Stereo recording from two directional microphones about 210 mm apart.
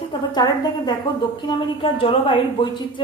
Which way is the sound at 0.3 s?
20° left (ahead or behind).